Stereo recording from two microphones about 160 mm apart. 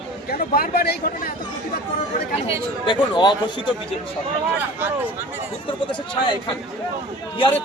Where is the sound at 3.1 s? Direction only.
30° left (ahead or behind).